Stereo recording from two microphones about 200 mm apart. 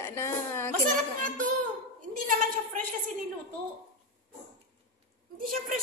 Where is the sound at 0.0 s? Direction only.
15° left (ahead or behind).